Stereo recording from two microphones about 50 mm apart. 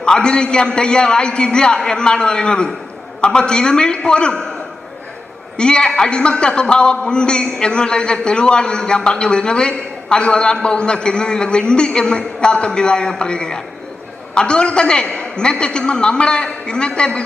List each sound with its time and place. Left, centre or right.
0.0 s a man's voice: centre
5.5 s a man's voice: centre